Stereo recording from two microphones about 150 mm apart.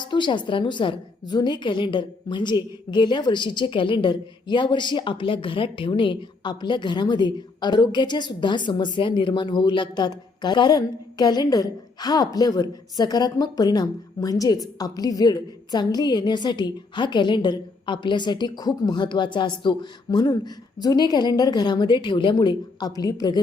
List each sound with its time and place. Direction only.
0.0 s a woman's voice: 30° left (ahead or behind)